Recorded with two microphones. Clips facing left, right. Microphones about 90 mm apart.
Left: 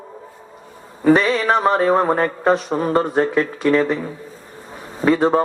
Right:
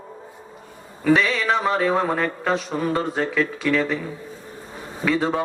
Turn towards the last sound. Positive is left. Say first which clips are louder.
# left 6 dB
turn(degrees=40)  # may be behind; listen again after turning